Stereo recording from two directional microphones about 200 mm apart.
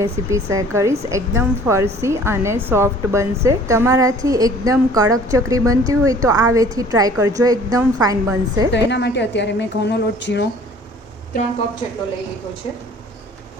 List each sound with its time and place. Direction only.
0.0 s speech: 15° right (ahead or behind)
8.7 s a woman's voice: 60° left (ahead or behind)